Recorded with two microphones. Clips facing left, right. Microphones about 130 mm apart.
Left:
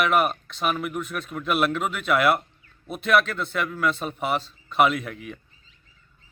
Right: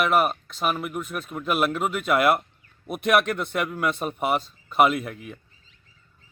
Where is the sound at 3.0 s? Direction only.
55° right (ahead or behind).